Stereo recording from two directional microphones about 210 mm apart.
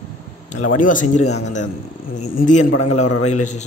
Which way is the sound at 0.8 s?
40° left (ahead or behind).